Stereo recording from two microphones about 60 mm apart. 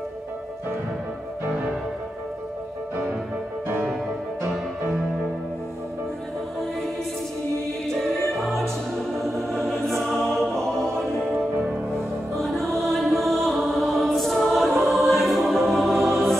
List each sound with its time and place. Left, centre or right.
3.6 s music: right
7.9 s music: centre
12.4 s music: centre